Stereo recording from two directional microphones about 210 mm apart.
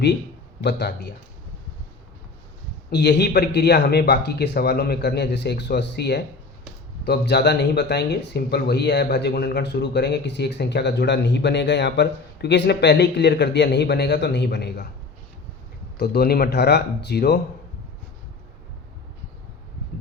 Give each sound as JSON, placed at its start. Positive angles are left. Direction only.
{"t": 0.6, "sound": "speech", "side_deg": 55}
{"t": 2.9, "sound": "speech", "side_deg": 50}
{"t": 16.0, "sound": "speech", "side_deg": 50}